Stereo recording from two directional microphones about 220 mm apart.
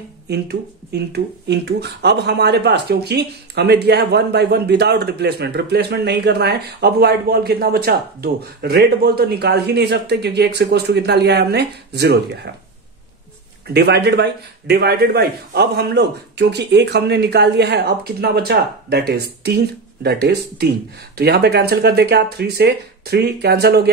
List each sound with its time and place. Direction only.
0.3 s speech: 50° right (ahead or behind)
13.7 s speech: 50° right (ahead or behind)